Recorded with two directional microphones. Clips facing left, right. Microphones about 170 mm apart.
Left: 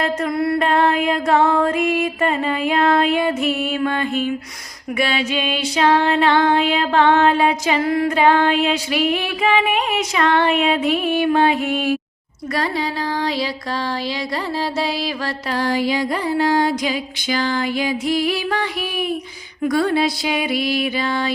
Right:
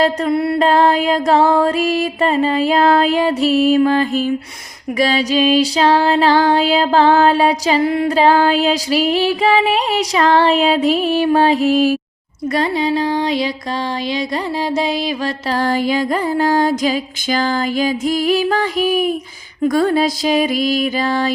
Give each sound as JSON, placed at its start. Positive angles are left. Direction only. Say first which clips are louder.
{"t": 0.0, "sound": "music", "louder": "right 4 dB", "side_deg": -25}
{"t": 12.5, "sound": "music", "louder": "right 5 dB", "side_deg": -20}
{"t": 15.5, "sound": "music", "louder": "right 2 dB", "side_deg": -50}